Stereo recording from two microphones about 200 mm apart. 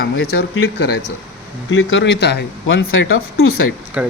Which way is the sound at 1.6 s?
75° left (ahead or behind).